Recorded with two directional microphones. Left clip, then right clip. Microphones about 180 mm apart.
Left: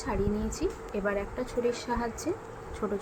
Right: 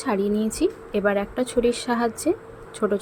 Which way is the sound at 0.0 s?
45° right (ahead or behind).